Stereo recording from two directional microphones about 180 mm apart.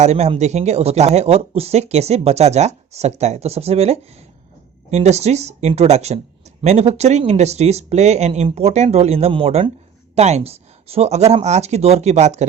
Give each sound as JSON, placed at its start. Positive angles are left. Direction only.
{"t": 0.0, "sound": "speech", "side_deg": -40}